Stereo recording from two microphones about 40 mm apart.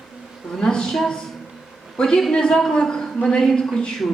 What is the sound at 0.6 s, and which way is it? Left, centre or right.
Speech, centre.